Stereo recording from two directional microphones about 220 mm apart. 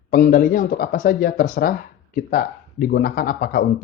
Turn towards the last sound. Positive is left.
turn(degrees=40)  # may be behind; listen again after turning